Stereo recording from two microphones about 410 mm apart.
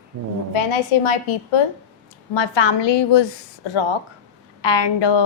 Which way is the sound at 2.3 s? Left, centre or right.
Left.